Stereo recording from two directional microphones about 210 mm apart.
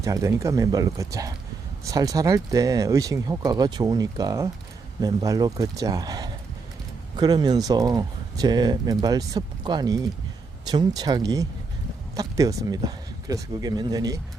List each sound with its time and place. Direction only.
0.0 s speech: 15° right (ahead or behind)